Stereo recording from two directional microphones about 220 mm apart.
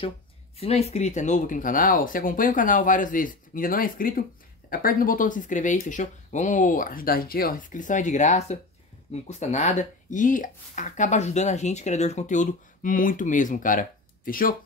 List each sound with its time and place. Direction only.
0.6 s speech: 30° left (ahead or behind)